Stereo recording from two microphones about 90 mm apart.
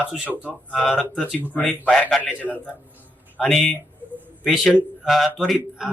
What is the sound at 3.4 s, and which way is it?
Speech, 5° left (ahead or behind).